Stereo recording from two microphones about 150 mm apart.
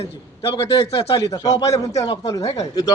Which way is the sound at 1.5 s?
20° left (ahead or behind).